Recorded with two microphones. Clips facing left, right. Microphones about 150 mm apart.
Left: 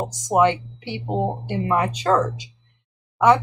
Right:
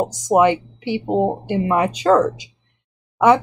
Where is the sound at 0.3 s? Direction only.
15° right (ahead or behind).